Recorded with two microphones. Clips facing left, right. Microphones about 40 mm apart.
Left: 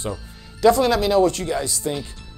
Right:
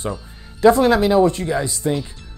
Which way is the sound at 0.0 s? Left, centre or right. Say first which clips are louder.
Right 2 dB; right.